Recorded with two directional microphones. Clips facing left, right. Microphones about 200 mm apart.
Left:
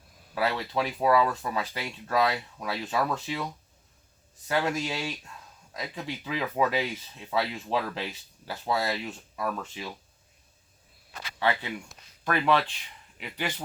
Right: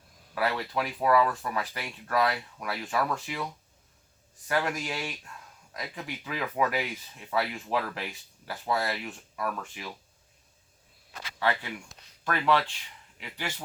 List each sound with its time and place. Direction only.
0.4 s speech: 25° left (ahead or behind)
4.4 s speech: 25° left (ahead or behind)
11.3 s speech: 20° left (ahead or behind)